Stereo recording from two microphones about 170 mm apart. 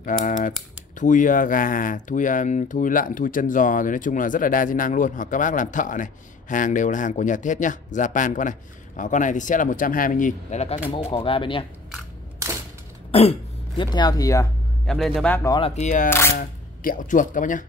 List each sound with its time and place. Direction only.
0.0 s speech: 50° left (ahead or behind); by 11.6 s 30° left (ahead or behind)
13.1 s throat clearing: 35° left (ahead or behind)
13.8 s speech: 25° left (ahead or behind)
14.9 s a man's voice: centre (ahead or behind)
15.4 s speech: 25° left (ahead or behind)
15.7 s speech: 45° left (ahead or behind)
16.1 s speech: 15° left (ahead or behind)
16.3 s speech: 50° left (ahead or behind)